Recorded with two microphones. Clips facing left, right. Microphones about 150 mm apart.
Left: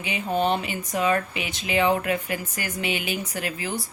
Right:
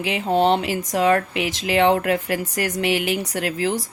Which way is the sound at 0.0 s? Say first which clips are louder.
Right 6 dB; 85° right.